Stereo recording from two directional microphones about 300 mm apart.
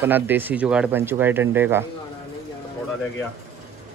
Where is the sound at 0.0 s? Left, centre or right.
Centre.